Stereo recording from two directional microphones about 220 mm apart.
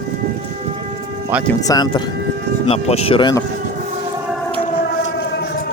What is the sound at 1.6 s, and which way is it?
Speech, 20° left (ahead or behind).